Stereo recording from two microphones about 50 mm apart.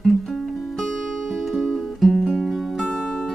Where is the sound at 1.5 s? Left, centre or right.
Centre.